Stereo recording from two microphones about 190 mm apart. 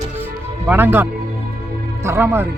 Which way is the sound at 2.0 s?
15° right (ahead or behind).